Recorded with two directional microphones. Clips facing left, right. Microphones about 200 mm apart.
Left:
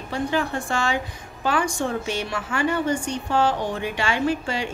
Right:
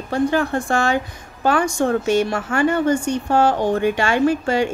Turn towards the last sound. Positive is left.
turn(degrees=-50)  # may be behind; listen again after turning